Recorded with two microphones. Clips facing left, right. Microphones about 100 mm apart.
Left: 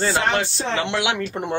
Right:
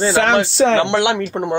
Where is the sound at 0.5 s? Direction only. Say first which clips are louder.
Right 10 dB; 80° right.